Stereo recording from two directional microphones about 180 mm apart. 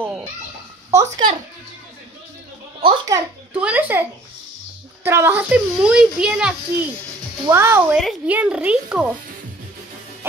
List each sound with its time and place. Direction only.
0.0 s children playing: 10° right (ahead or behind)
0.9 s a child's voice: 15° right (ahead or behind)
2.8 s a child's voice: 30° right (ahead or behind)
3.5 s a child's voice: 5° right (ahead or behind)